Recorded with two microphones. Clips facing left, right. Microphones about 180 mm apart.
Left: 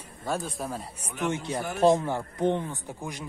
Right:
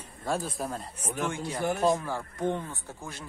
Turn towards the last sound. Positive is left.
turn(degrees=15)  # may be behind; listen again after turning